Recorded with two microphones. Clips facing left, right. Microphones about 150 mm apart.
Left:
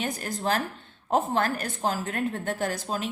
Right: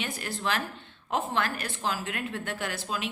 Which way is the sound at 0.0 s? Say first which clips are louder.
Left 3 dB; 40° left (ahead or behind).